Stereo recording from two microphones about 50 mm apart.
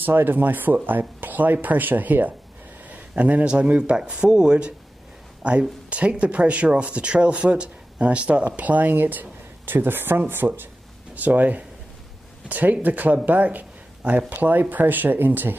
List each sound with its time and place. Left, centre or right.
0.0 s speech: right
2.9 s a sound: right
3.4 s speech: right